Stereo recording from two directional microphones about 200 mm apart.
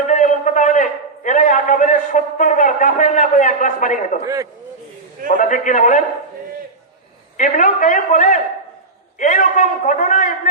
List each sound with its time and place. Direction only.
0.1 s a man's voice: 40° left (ahead or behind)
5.4 s a man's voice: 40° left (ahead or behind)
7.3 s a man's voice: 40° left (ahead or behind)